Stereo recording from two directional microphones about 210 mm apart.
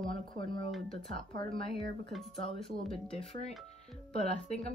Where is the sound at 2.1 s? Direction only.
Centre (ahead or behind).